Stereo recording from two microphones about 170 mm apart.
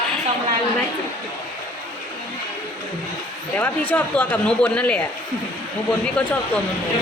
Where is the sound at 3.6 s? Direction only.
10° left (ahead or behind).